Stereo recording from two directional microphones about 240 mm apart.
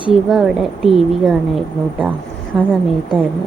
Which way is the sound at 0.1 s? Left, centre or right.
Centre.